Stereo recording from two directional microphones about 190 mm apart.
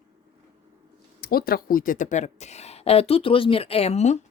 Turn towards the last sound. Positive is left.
turn(degrees=35)  # may be behind; listen again after turning